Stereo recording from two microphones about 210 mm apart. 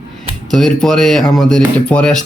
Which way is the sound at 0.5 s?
Centre (ahead or behind).